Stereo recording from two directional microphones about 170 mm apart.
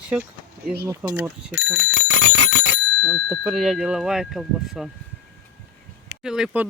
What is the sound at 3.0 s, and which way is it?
Speech, centre (ahead or behind).